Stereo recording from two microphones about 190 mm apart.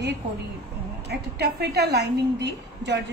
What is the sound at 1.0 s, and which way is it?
A woman's voice, 60° right (ahead or behind).